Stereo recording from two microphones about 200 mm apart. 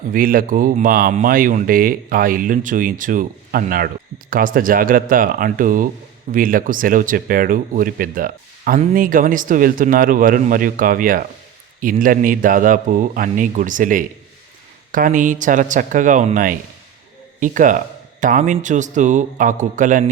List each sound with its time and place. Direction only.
0.1 s speech: 45° right (ahead or behind)